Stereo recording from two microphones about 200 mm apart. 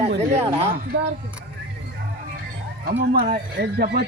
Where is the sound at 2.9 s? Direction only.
45° right (ahead or behind).